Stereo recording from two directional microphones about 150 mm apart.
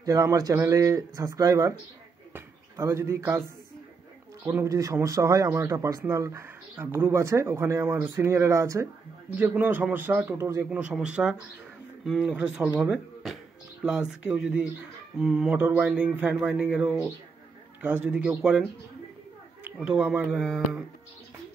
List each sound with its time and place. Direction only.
0.0 s speech: 20° right (ahead or behind)
4.6 s speech: 20° right (ahead or behind); by 20.8 s 5° right (ahead or behind)